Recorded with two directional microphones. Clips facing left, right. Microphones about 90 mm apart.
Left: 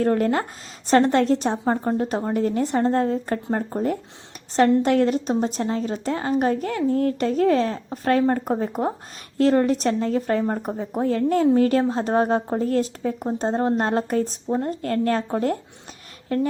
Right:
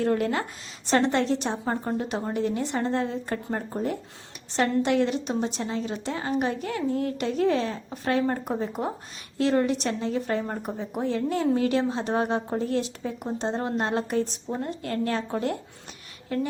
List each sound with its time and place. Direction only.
0.0 s a woman's voice: 45° left (ahead or behind)